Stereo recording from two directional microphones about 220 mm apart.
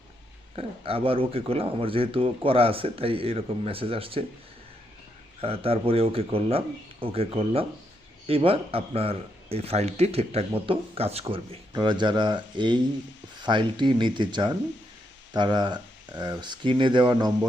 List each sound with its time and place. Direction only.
0.5 s a man's voice: 25° right (ahead or behind)
5.4 s a man's voice: 25° right (ahead or behind)